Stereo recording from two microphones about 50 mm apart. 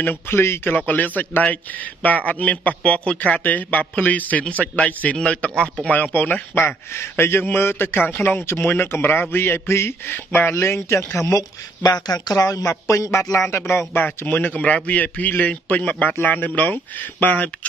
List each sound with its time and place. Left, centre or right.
0.0 s a man's voice: left; by 5.9 s centre
6.1 s a man's voice: left
10.0 s a man's voice: left
10.5 s speech: left
11.1 s a man's voice: left
12.6 s a man's voice: left
13.5 s speech: left
13.9 s a man's voice: left